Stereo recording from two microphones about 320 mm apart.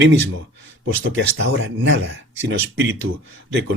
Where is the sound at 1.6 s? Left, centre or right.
Right.